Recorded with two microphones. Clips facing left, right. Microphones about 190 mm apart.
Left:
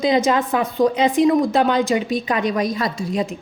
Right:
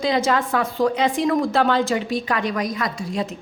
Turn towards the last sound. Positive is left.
turn(degrees=25)  # may be behind; listen again after turning